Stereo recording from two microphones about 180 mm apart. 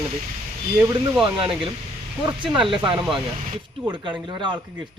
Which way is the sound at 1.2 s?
30° right (ahead or behind).